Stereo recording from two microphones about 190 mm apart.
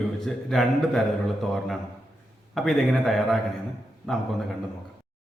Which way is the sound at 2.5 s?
Centre (ahead or behind).